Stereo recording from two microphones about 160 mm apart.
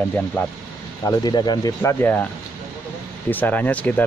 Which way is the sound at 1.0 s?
25° left (ahead or behind).